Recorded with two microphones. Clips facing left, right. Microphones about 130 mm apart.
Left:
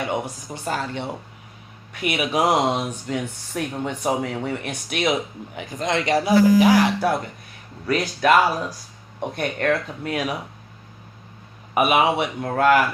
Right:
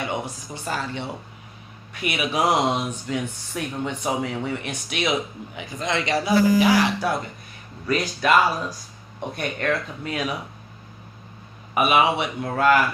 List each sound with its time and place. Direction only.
0.1 s speech: 50° left (ahead or behind)
7.9 s speech: 60° left (ahead or behind)
11.7 s speech: 55° left (ahead or behind)